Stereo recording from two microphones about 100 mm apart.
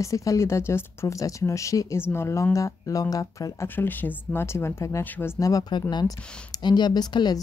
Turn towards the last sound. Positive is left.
turn(degrees=45)  # may be behind; listen again after turning